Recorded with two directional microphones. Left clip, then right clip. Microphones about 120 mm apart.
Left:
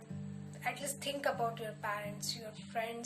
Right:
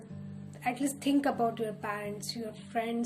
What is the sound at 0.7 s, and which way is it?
Speech, 25° left (ahead or behind).